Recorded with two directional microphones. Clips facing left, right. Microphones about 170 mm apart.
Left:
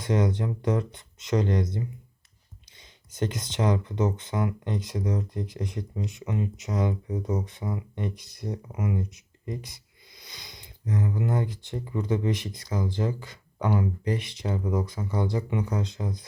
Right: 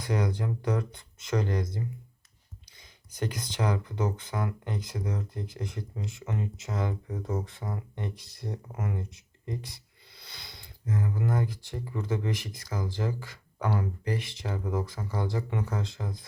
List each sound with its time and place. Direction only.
0.0 s speech: 20° left (ahead or behind)